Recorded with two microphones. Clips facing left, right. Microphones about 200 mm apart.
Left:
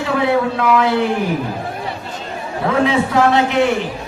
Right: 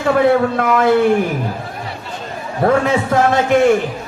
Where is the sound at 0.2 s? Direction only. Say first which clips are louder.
Right 2 dB; 50° right (ahead or behind).